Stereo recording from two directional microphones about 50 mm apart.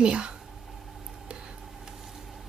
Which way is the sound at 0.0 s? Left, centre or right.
Centre.